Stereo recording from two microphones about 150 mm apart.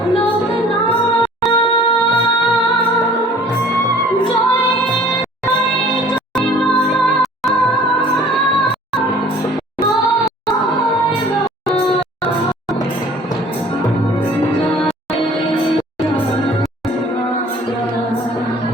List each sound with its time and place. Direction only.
1.5 s music: 30° left (ahead or behind)